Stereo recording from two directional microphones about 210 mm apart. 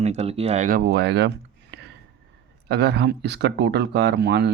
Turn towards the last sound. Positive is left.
turn(degrees=-50)  # may be behind; listen again after turning